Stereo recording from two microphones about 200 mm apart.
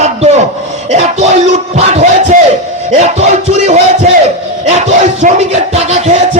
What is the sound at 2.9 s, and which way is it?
Music, 35° right (ahead or behind).